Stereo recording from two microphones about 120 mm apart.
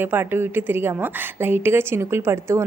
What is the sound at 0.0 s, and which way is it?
A woman's voice, 15° right (ahead or behind).